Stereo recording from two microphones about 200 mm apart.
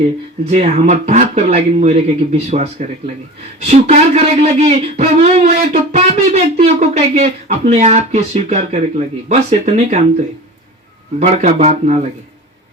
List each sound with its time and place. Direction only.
0.5 s speech: 35° right (ahead or behind)
11.2 s speech: 35° right (ahead or behind)